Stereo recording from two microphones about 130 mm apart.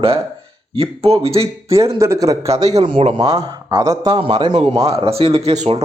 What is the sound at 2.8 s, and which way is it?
Speech, 45° right (ahead or behind).